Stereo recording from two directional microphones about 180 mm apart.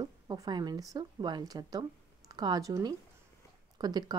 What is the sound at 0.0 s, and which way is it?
A woman's voice, 20° right (ahead or behind).